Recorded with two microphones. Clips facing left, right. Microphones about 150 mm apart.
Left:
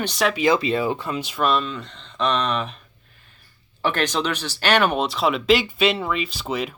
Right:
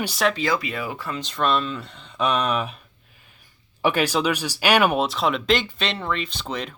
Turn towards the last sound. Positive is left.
turn(degrees=5)  # may be behind; listen again after turning